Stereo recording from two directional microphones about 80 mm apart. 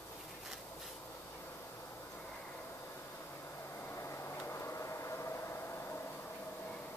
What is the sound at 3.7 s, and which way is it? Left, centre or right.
Vehicle, left.